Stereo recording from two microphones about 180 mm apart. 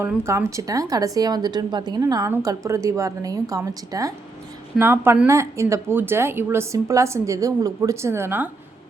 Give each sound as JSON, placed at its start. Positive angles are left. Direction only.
{"t": 0.0, "sound": "a woman's voice", "side_deg": -15}